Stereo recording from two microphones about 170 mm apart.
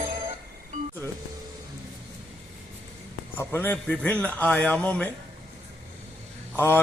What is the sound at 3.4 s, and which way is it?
A man's voice, 15° left (ahead or behind).